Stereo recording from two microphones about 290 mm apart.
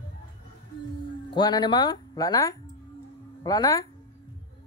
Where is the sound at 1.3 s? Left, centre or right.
Centre.